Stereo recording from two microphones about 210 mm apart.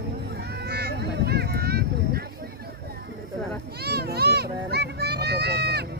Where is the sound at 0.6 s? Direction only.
50° right (ahead or behind).